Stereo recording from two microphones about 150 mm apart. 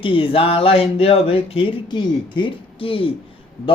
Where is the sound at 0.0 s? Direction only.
35° left (ahead or behind).